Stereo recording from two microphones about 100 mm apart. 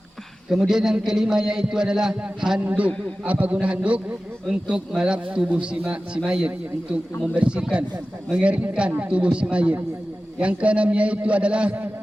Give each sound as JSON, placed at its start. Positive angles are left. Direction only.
{"t": 0.5, "sound": "a man's voice", "side_deg": -5}